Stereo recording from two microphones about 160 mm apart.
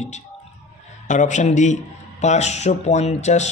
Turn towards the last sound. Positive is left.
turn(degrees=45)  # may be behind; listen again after turning